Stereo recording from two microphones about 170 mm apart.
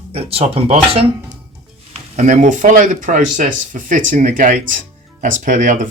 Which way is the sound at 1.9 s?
45° right (ahead or behind).